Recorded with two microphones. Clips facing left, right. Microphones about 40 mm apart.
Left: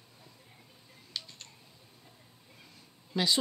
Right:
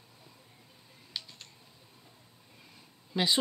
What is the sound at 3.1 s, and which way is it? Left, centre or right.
Speech, centre.